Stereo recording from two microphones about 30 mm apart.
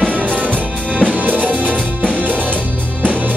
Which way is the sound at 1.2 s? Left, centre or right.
Right.